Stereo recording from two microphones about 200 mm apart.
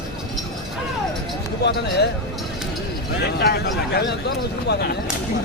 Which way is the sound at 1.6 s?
55° left (ahead or behind).